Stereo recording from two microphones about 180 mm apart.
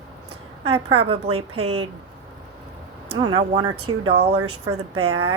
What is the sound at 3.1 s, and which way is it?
A woman's voice, 25° right (ahead or behind).